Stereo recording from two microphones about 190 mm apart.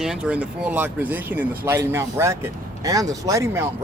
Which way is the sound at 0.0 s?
5° right (ahead or behind).